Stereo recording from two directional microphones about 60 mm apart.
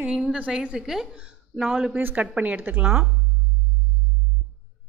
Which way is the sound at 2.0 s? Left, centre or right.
Right.